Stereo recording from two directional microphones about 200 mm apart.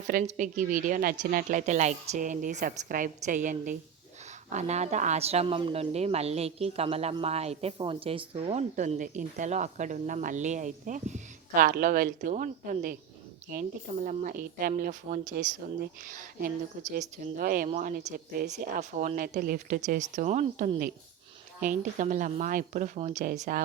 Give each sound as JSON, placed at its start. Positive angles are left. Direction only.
{"t": 0.1, "sound": "speech", "side_deg": -40}
{"t": 23.3, "sound": "speech", "side_deg": -45}